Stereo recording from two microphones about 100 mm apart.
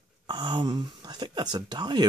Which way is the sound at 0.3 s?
50° right (ahead or behind).